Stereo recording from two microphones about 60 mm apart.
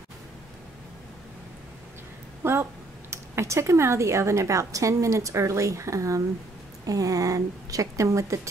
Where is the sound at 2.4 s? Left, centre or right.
Right.